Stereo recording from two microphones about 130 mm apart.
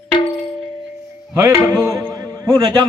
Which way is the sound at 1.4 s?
20° right (ahead or behind).